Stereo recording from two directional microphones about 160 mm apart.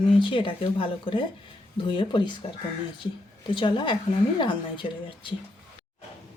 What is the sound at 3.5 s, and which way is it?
A woman's voice, 30° left (ahead or behind).